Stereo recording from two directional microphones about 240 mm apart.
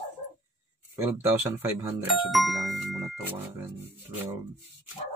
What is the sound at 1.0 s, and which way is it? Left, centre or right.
Speech, centre.